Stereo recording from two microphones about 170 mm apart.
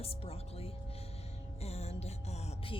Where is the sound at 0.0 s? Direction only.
35° left (ahead or behind).